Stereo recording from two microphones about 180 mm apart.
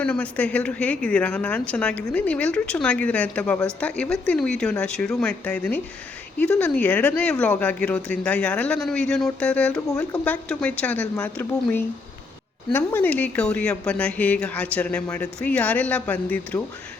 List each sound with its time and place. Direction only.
0.0 s a woman's voice: 5° left (ahead or behind)